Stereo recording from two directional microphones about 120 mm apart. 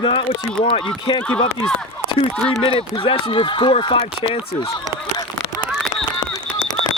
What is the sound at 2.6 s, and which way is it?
Speech, 55° left (ahead or behind).